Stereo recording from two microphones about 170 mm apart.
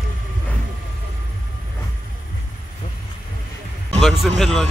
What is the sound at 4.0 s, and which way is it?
Speech, centre (ahead or behind).